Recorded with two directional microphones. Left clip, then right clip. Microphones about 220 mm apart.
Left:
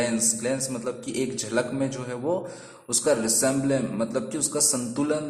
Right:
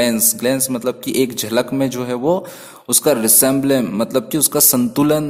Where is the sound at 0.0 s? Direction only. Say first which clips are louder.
Right 9 dB; 40° right (ahead or behind).